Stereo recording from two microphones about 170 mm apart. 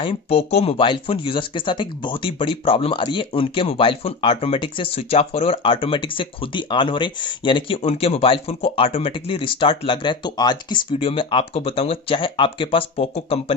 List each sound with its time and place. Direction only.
0.0 s speech: 35° left (ahead or behind)